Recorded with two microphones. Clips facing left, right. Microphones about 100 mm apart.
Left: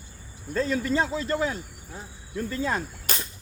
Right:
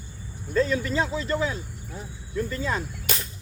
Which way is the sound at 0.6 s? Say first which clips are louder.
Right 1 dB; 40° left (ahead or behind).